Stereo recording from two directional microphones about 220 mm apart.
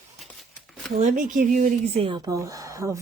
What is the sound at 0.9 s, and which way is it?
Speech, 35° right (ahead or behind).